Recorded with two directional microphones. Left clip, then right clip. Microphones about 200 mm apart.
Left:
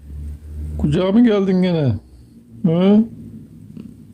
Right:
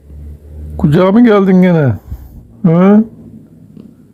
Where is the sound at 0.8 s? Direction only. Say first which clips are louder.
Right 7 dB; 20° right (ahead or behind).